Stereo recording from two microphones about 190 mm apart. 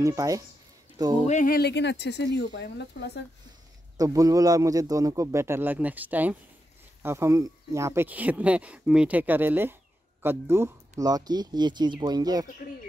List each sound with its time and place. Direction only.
0.0 s speech: 15° right (ahead or behind)
1.2 s speech: 40° left (ahead or behind); by 3.3 s 60° left (ahead or behind)
3.9 s speech: 20° right (ahead or behind)